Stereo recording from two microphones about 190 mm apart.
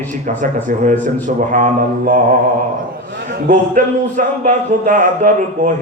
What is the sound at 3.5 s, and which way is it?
Music, 45° right (ahead or behind).